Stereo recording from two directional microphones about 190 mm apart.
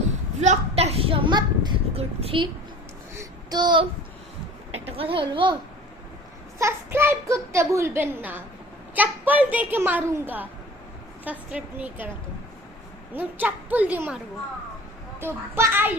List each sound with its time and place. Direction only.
0.3 s a sound: 35° right (ahead or behind)
3.2 s child singing: 20° right (ahead or behind)
4.7 s a child's voice: 30° right (ahead or behind)
6.6 s a child's voice: 15° right (ahead or behind)
13.1 s a child's voice: 10° right (ahead or behind)
15.2 s a child's voice: 15° right (ahead or behind)